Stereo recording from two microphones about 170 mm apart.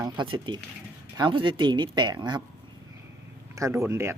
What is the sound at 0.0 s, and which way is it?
Speech, 25° right (ahead or behind).